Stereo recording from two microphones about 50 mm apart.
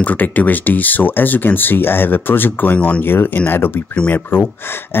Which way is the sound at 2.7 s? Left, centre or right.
Left.